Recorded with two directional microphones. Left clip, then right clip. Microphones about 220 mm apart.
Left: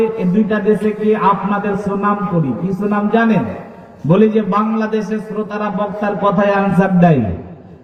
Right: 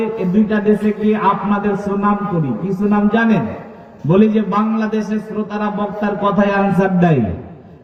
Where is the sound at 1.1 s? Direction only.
50° right (ahead or behind).